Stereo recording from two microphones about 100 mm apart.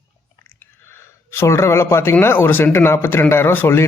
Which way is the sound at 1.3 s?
25° left (ahead or behind).